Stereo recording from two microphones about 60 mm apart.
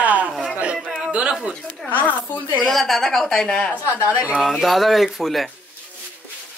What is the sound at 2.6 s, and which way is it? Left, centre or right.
A woman's voice, centre.